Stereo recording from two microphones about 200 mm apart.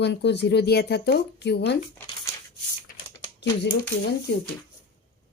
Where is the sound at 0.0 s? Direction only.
60° left (ahead or behind).